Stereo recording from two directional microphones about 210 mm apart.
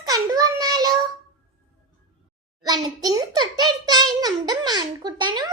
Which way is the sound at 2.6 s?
20° right (ahead or behind).